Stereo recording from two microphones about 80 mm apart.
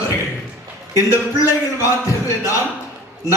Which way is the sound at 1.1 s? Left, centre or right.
Left.